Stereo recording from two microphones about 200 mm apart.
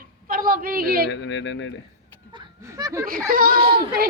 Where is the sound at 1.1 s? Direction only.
65° left (ahead or behind).